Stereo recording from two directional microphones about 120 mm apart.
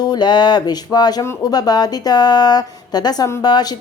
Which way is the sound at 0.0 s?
35° left (ahead or behind).